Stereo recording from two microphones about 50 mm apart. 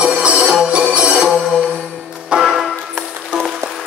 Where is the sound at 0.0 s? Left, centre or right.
Right.